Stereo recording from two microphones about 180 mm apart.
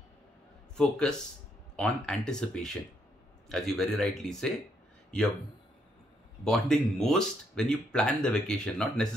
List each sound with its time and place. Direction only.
0.7 s speech: 5° left (ahead or behind)
6.4 s speech: 5° left (ahead or behind)